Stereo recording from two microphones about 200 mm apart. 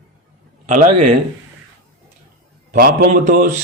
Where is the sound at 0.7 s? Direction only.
40° right (ahead or behind).